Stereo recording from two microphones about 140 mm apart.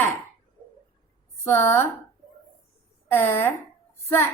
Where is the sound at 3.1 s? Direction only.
15° left (ahead or behind).